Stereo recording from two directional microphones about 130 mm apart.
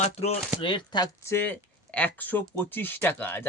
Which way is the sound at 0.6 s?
35° left (ahead or behind).